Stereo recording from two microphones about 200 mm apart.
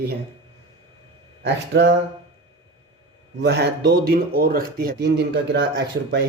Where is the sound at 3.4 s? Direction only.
55° right (ahead or behind).